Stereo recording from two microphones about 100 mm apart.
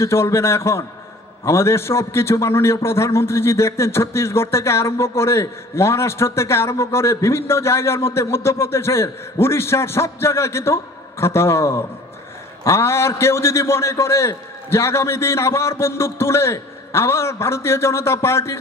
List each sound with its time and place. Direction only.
0.0 s a man's voice: 25° left (ahead or behind)